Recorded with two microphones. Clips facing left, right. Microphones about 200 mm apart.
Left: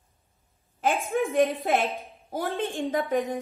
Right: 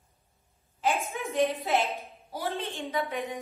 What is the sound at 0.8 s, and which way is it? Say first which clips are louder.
A woman's voice: left 5 dB; 50° left (ahead or behind).